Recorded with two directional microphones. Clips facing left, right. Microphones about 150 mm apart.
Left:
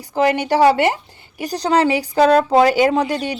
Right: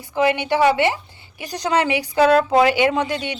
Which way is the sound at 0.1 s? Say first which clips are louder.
Left 2 dB; 40° left (ahead or behind).